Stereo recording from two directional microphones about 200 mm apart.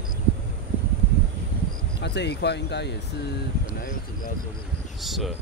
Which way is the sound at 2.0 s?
60° left (ahead or behind).